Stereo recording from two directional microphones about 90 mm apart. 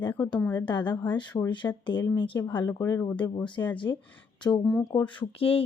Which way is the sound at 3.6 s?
40° left (ahead or behind).